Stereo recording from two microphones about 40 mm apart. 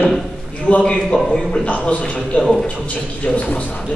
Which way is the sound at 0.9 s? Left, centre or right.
Centre.